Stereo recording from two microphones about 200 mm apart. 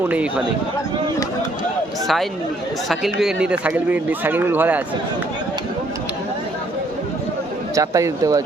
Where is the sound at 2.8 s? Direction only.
Centre (ahead or behind).